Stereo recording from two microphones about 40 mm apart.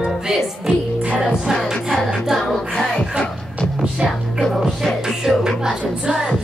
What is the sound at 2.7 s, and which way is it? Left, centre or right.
Music, centre.